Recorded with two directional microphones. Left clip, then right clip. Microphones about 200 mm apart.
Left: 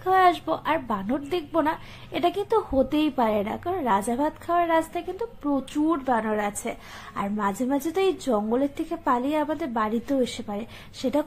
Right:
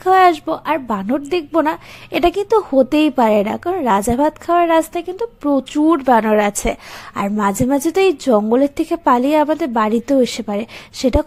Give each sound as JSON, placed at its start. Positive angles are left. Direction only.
{"t": 0.0, "sound": "a woman's voice", "side_deg": -35}